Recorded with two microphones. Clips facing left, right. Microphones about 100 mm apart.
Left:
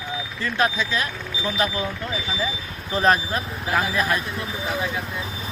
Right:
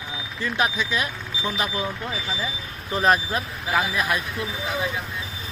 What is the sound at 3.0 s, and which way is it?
Speech, 5° right (ahead or behind).